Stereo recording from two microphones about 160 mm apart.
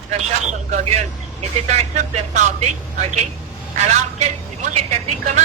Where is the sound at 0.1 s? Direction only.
45° right (ahead or behind).